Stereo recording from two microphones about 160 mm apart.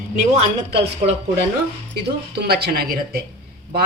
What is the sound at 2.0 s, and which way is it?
Speech, 85° right.